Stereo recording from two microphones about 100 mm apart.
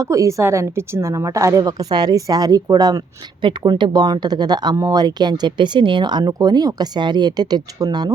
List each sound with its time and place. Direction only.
0.0 s a woman's voice: 30° right (ahead or behind)
3.4 s speech: 50° right (ahead or behind)